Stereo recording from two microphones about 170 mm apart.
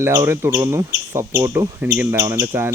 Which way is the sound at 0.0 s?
15° right (ahead or behind).